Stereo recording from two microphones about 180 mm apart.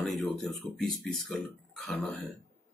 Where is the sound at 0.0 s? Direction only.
Centre (ahead or behind).